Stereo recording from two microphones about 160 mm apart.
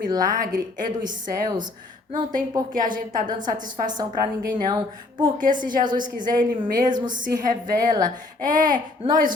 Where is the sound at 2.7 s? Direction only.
55° right (ahead or behind).